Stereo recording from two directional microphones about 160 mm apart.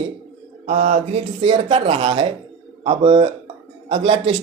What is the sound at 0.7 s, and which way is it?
Mantra, 45° right (ahead or behind).